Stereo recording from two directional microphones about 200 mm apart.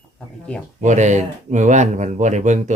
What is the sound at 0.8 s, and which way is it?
Speech, 35° right (ahead or behind).